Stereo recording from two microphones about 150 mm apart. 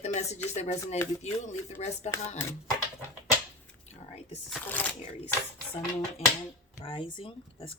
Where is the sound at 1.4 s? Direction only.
50° left (ahead or behind).